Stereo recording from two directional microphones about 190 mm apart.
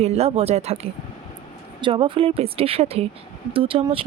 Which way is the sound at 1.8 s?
25° right (ahead or behind).